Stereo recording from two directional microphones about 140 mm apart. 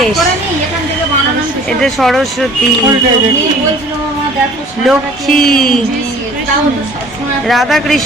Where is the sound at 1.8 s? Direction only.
Centre (ahead or behind).